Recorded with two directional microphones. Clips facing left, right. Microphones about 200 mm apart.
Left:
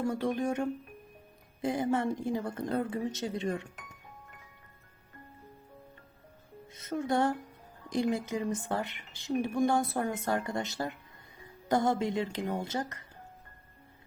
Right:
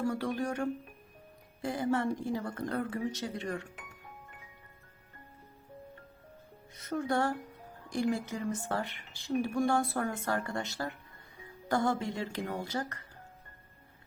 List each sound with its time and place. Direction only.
0.0 s speech: 20° left (ahead or behind)
6.7 s speech: 20° left (ahead or behind)